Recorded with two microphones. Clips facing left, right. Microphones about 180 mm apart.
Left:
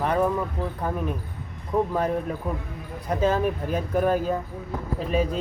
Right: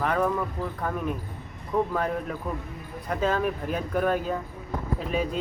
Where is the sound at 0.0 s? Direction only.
25° left (ahead or behind).